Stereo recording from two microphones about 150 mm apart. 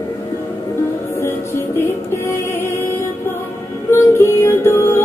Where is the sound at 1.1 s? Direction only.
20° left (ahead or behind).